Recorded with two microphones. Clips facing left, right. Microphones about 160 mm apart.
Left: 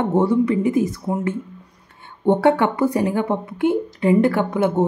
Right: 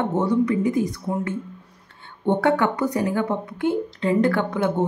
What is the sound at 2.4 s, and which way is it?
Speech, 25° left (ahead or behind).